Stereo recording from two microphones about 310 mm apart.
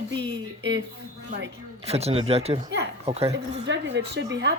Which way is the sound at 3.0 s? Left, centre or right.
Centre.